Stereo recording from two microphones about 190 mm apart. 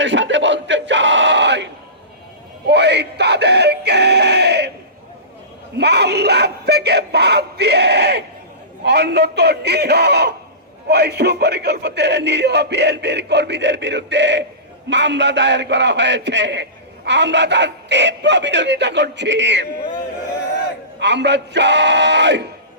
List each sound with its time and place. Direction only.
0.0 s a sound: 75° right (ahead or behind)
2.6 s music: 65° right (ahead or behind)
5.7 s speech: 60° right (ahead or behind)
21.0 s speech: 65° right (ahead or behind)